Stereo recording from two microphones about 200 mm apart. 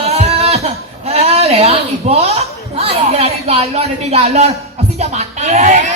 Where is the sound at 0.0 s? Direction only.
30° right (ahead or behind).